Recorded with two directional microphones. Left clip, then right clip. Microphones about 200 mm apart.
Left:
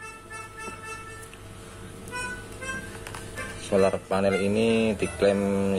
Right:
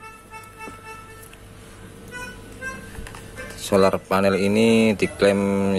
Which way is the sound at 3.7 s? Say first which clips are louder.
Right 5 dB; 25° right (ahead or behind).